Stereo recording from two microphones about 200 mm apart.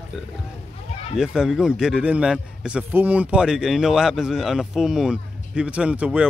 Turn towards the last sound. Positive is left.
turn(degrees=-5)  # may be behind; listen again after turning